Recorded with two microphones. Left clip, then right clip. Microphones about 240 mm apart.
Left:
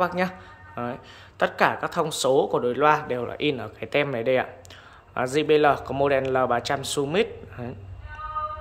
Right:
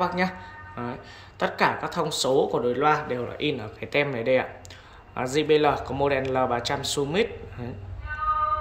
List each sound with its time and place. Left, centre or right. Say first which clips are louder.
0.0 s speech: left 1 dB; centre